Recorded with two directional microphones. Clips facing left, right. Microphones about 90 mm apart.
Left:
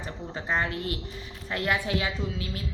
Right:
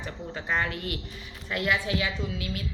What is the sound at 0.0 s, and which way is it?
A woman's voice, 30° left (ahead or behind).